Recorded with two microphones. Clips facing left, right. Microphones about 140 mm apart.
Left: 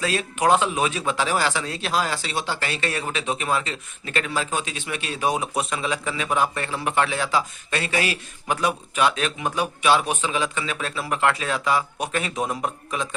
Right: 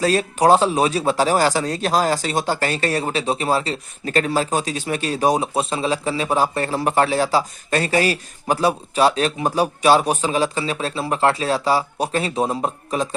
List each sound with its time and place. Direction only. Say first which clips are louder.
0.0 s speech: right 6 dB; 40° right (ahead or behind)